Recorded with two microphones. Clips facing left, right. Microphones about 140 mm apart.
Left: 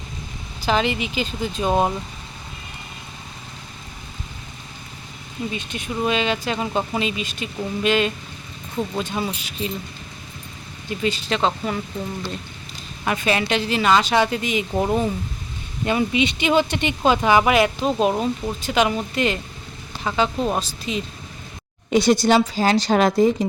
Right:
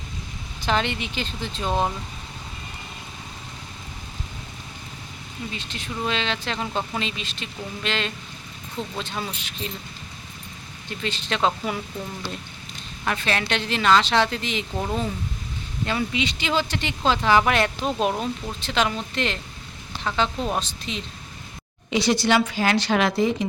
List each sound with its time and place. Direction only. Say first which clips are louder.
0.6 s speech: left 3 dB; 5° left (ahead or behind)
5.5 s speech: left 5 dB; 15° left (ahead or behind)
11.0 s speech: left 3 dB; centre (ahead or behind)
13.1 s speech: left 4 dB; 10° left (ahead or behind)
14.7 s speech: left 7 dB; 25° left (ahead or behind); by 21.0 s 5° left (ahead or behind)
21.8 s a woman's voice: left 5 dB; 50° left (ahead or behind)
22.4 s a woman's voice: left 3 dB; 35° left (ahead or behind)